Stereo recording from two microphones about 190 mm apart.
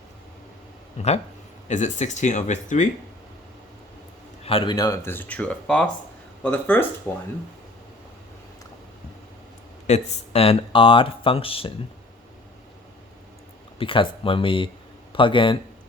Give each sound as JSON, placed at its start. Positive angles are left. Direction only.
{"t": 0.9, "sound": "speech", "side_deg": 35}
{"t": 4.4, "sound": "speech", "side_deg": 25}
{"t": 9.8, "sound": "speech", "side_deg": 35}
{"t": 13.7, "sound": "speech", "side_deg": 25}